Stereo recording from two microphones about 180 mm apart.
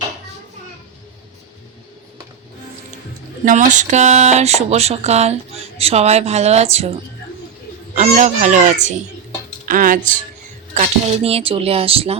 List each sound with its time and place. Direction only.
3.4 s speech: 45° right (ahead or behind)
7.9 s speech: 40° right (ahead or behind)